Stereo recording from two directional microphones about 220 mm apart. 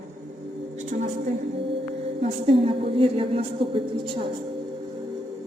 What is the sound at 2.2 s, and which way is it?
A woman's voice, 25° right (ahead or behind).